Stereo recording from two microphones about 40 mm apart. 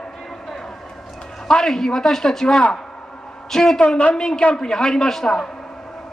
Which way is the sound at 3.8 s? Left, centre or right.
Left.